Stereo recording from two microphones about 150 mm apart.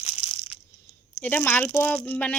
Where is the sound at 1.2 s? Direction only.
15° left (ahead or behind).